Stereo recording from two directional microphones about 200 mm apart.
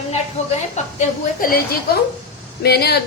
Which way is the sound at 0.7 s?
40° left (ahead or behind).